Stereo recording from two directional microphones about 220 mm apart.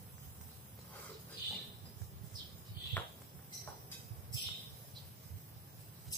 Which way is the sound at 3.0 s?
10° left (ahead or behind).